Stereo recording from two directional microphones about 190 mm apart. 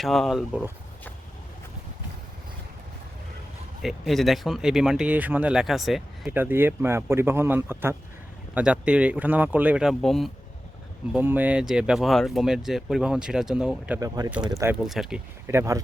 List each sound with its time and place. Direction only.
0.0 s speech: centre (ahead or behind)
3.8 s speech: centre (ahead or behind)
11.1 s speech: 10° right (ahead or behind)
15.4 s speech: 15° right (ahead or behind)